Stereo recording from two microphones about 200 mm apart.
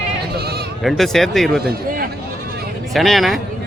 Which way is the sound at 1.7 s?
45° right (ahead or behind).